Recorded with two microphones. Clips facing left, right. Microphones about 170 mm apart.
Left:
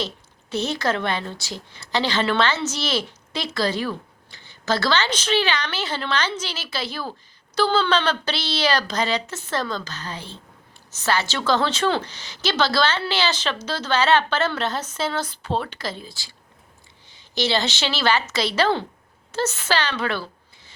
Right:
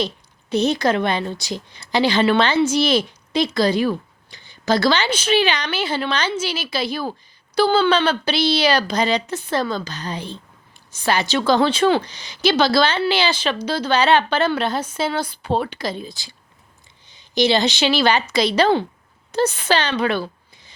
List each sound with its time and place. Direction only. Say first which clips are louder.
0.5 s a woman's voice: right 6 dB; 15° right (ahead or behind)